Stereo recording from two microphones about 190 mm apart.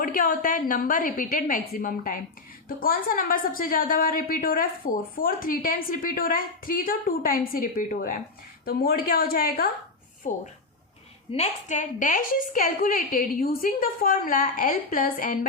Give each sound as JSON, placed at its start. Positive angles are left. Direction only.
{"t": 0.0, "sound": "a woman's voice", "side_deg": 50}